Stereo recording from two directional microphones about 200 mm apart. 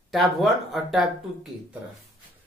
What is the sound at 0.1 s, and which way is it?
Speech, centre (ahead or behind).